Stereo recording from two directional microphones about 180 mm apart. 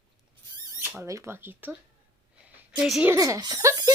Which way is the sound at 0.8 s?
15° right (ahead or behind).